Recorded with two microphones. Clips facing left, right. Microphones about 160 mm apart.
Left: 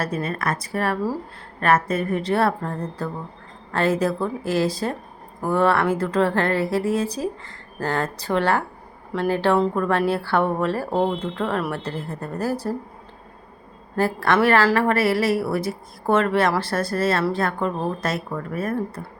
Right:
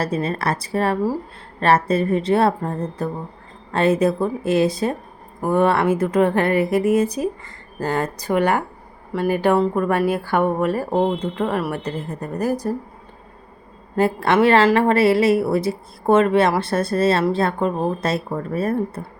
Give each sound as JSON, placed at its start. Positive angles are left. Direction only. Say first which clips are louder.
{"t": 0.0, "sound": "a woman's voice", "louder": "right 3 dB", "side_deg": -30}
{"t": 13.9, "sound": "a woman's voice", "louder": "right 3 dB", "side_deg": -20}